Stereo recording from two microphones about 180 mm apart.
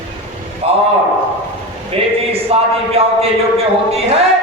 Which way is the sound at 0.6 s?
30° right (ahead or behind).